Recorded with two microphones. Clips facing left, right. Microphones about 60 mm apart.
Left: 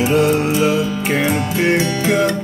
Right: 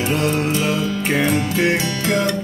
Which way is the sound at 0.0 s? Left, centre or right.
Centre.